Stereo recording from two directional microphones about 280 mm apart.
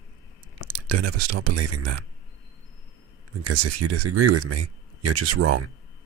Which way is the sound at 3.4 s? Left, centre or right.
Right.